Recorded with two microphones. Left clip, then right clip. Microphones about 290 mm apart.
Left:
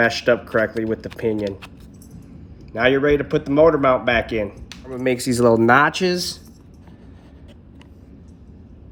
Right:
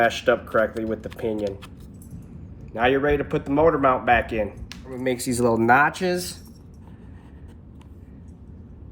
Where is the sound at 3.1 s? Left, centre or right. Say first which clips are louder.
Left 4 dB; left.